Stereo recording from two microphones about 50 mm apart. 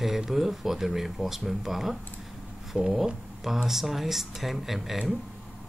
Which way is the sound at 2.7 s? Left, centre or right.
Centre.